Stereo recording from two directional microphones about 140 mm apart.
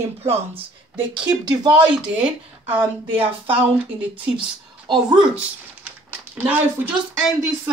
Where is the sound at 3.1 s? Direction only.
40° right (ahead or behind).